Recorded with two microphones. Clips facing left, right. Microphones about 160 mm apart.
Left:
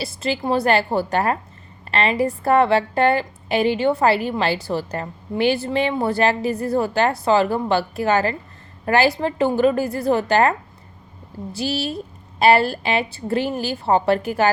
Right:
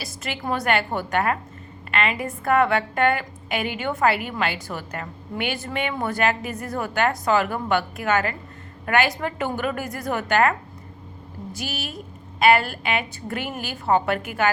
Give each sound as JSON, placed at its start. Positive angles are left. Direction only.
{"t": 0.0, "sound": "a woman's voice", "side_deg": 30}
{"t": 11.5, "sound": "a woman's voice", "side_deg": 30}